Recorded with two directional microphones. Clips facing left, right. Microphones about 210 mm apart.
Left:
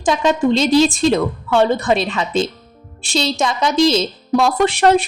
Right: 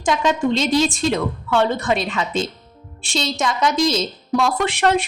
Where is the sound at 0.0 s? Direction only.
30° left (ahead or behind).